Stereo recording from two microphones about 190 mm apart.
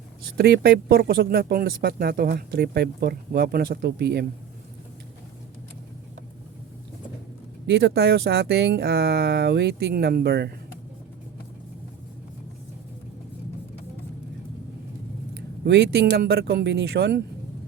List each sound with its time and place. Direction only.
0.3 s speech: 60° right (ahead or behind)
7.7 s speech: 60° right (ahead or behind)
15.6 s speech: 60° right (ahead or behind)